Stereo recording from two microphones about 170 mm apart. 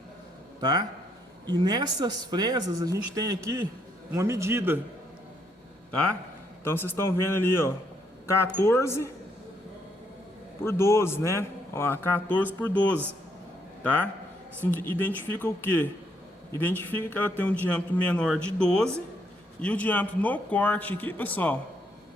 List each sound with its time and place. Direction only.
0.6 s a man's voice: 25° right (ahead or behind)
5.9 s a man's voice: 5° left (ahead or behind)
10.6 s a man's voice: 15° left (ahead or behind)